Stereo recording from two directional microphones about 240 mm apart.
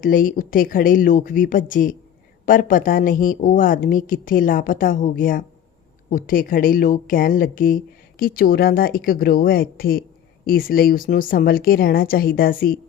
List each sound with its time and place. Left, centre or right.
0.0 s a woman's voice: left